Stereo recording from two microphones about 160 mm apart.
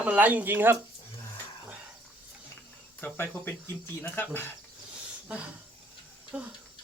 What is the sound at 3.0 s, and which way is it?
Speech, 15° left (ahead or behind).